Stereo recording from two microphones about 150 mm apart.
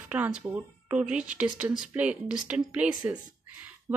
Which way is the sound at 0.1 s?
10° right (ahead or behind).